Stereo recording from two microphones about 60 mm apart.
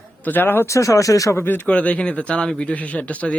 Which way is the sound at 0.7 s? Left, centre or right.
Left.